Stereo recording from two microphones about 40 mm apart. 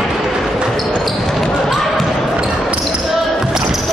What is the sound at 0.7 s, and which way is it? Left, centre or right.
Basketball bounce, centre.